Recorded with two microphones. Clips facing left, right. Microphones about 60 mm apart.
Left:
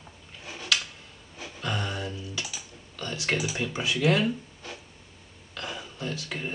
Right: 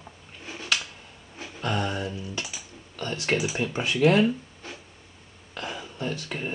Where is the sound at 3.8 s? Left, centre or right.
Right.